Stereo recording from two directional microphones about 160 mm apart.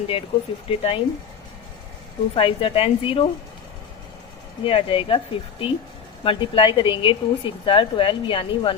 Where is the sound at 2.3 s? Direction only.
35° left (ahead or behind).